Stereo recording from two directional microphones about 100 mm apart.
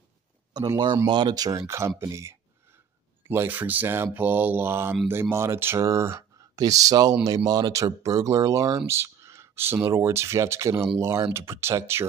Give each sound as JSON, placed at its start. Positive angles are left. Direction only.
{"t": 0.5, "sound": "speech", "side_deg": -45}
{"t": 1.7, "sound": "speech", "side_deg": -25}